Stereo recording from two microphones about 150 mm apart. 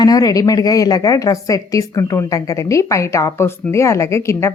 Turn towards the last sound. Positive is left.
turn(degrees=20)  # may be behind; listen again after turning